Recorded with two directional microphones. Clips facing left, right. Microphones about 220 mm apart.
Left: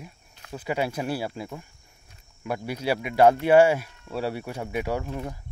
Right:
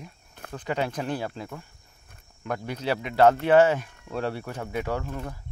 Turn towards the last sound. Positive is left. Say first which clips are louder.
# left 2 dB
turn(degrees=15)  # may be behind; listen again after turning